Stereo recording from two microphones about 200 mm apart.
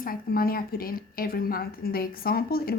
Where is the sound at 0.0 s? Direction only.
45° left (ahead or behind).